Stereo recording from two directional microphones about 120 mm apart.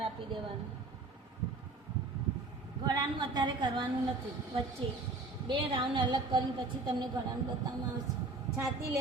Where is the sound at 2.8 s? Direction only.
35° right (ahead or behind).